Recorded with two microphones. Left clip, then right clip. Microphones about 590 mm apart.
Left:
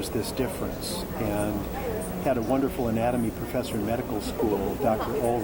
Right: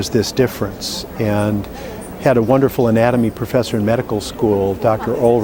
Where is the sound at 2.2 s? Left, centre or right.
Right.